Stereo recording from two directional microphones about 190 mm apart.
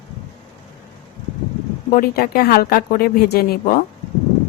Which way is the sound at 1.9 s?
55° left (ahead or behind).